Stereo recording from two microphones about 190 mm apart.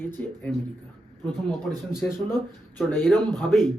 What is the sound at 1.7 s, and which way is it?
Speech, centre (ahead or behind).